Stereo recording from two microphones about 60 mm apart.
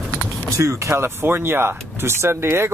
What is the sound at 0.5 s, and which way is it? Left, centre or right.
Speech, right.